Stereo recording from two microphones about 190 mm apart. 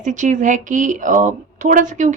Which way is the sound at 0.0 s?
40° right (ahead or behind).